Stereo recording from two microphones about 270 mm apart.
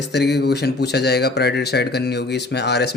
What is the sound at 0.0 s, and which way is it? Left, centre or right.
Speech, left.